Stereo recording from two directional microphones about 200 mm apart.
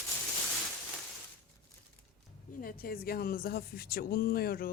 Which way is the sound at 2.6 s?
45° left (ahead or behind).